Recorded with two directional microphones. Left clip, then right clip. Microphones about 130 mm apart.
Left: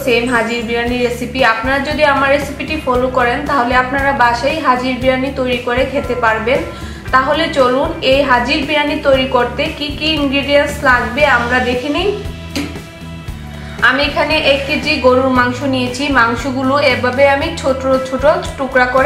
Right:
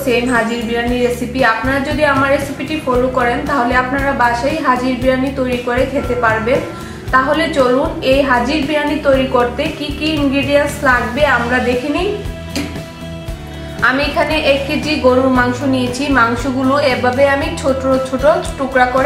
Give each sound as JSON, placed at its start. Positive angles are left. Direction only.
{"t": 0.0, "sound": "a woman's voice", "side_deg": 5}
{"t": 13.7, "sound": "a woman's voice", "side_deg": 0}